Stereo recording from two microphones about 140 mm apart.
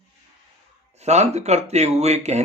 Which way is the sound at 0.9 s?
50° right (ahead or behind).